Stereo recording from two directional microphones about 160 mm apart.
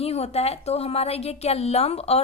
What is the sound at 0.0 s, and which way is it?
A woman's voice, 40° left (ahead or behind).